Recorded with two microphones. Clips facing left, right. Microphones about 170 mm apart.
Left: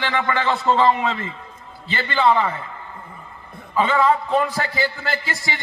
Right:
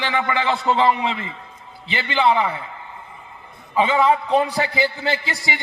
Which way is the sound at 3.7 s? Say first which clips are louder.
Right 1 dB; 15° right (ahead or behind).